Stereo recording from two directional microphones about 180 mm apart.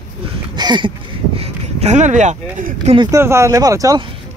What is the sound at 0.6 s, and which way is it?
Speech, 25° right (ahead or behind).